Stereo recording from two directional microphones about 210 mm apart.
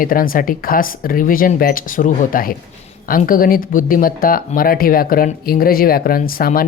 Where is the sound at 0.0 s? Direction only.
40° left (ahead or behind).